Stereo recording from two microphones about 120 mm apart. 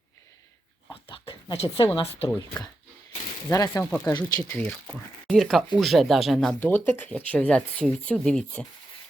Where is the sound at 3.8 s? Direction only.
15° left (ahead or behind).